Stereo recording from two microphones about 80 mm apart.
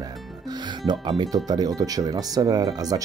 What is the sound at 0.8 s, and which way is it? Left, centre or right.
Speech, right.